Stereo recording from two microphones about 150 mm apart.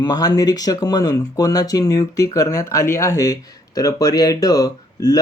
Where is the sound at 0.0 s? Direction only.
25° left (ahead or behind).